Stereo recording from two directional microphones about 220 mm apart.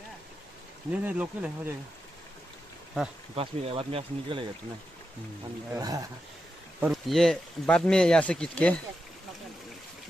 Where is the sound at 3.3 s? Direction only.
25° right (ahead or behind).